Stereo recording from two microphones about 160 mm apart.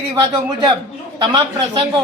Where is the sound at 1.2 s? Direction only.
30° right (ahead or behind).